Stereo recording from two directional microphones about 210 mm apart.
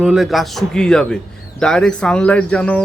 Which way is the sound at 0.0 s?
Centre (ahead or behind).